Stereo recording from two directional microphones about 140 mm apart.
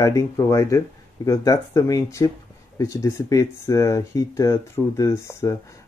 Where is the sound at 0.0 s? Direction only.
25° left (ahead or behind).